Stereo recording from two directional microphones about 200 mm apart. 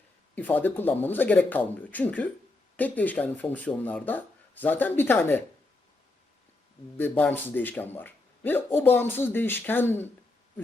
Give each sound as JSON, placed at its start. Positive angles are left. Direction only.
{"t": 0.3, "sound": "speech", "side_deg": 10}
{"t": 6.9, "sound": "speech", "side_deg": 10}